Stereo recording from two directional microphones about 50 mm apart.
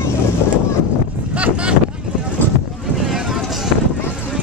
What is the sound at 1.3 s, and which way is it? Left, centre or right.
Wind noise, right.